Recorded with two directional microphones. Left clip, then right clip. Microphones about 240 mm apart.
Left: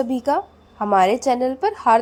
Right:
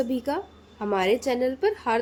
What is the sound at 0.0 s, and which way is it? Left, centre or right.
A woman's voice, centre.